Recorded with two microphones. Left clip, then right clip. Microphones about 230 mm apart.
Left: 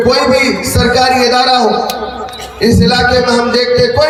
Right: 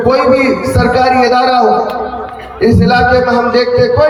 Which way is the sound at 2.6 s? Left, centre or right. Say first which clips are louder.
Right 1 dB; left.